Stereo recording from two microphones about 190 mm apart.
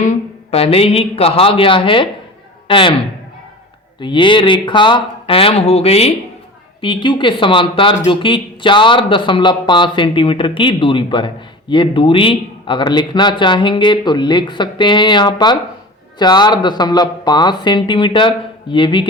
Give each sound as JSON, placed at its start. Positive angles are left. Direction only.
{"t": 0.0, "sound": "a man's voice", "side_deg": 35}
{"t": 4.0, "sound": "speech", "side_deg": 25}